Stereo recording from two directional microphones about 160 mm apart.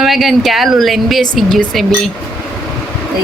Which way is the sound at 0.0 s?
Centre (ahead or behind).